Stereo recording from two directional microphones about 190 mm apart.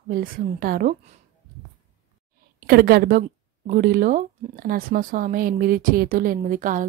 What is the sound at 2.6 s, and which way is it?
A woman's voice, 55° right (ahead or behind).